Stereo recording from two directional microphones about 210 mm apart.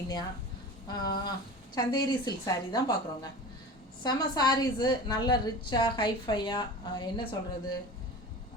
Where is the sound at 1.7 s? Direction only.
20° left (ahead or behind).